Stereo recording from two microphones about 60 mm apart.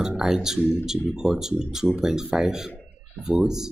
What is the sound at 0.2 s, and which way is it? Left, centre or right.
Speech, centre.